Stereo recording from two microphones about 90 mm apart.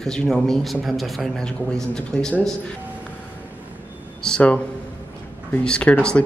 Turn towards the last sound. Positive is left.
turn(degrees=10)  # may be behind; listen again after turning